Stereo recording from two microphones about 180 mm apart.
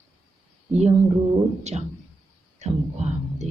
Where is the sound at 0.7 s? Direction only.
40° right (ahead or behind).